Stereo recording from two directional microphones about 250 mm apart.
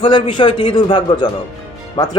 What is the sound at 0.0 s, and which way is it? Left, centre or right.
A man's voice, centre.